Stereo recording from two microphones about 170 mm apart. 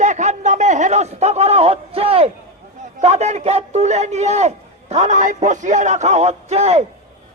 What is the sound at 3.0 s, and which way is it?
A man's voice, 40° right (ahead or behind).